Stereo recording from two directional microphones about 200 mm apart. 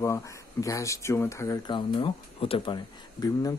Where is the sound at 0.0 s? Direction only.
15° left (ahead or behind).